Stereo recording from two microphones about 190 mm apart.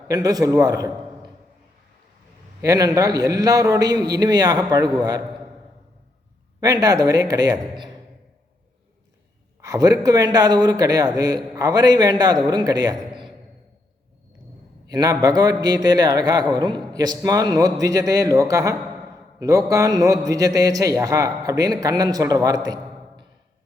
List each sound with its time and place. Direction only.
0.1 s a man's voice: 20° right (ahead or behind)
2.6 s a man's voice: 20° right (ahead or behind)
6.6 s a man's voice: 20° right (ahead or behind)
9.6 s a man's voice: 20° right (ahead or behind)
14.8 s a man's voice: 20° right (ahead or behind)